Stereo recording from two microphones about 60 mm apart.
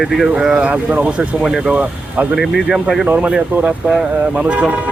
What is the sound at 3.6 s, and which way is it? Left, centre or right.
Speech, right.